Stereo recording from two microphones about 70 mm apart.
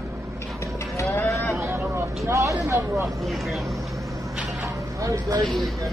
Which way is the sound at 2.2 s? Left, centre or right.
Right.